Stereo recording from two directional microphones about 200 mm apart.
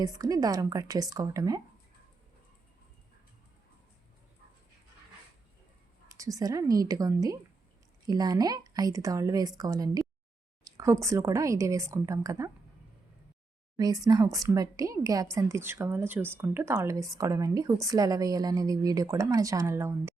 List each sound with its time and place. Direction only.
0.0 s a woman's voice: 20° right (ahead or behind)
6.1 s a woman's voice: 15° right (ahead or behind)
13.7 s a woman's voice: 20° right (ahead or behind)